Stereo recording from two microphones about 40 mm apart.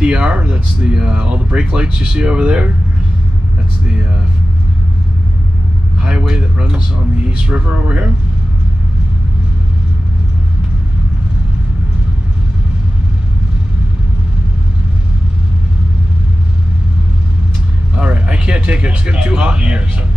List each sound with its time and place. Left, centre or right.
0.0 s speech: right
3.8 s speech: right
5.9 s speech: right
17.9 s speech: right